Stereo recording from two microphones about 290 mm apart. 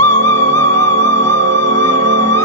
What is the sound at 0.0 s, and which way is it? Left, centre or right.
Music, right.